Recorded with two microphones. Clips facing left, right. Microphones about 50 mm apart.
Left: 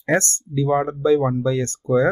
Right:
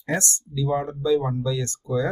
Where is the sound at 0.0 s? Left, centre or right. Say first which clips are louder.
Left 6 dB; left.